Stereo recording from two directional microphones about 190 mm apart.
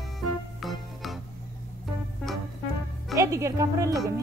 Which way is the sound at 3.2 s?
15° right (ahead or behind).